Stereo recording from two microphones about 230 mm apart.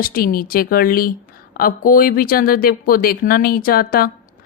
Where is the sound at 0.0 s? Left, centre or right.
Left.